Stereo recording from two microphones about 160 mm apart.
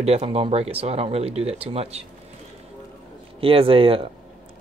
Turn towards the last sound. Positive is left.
turn(degrees=-35)  # may be behind; listen again after turning